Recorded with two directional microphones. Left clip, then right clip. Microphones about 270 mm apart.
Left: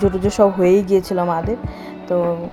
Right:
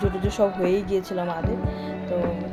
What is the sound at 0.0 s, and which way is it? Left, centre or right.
Speech, left.